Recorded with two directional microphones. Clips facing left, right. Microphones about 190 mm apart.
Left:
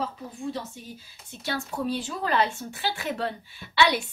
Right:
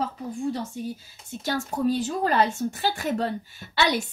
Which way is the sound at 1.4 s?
45° right (ahead or behind).